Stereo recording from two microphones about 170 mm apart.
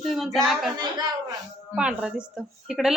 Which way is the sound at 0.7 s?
25° right (ahead or behind).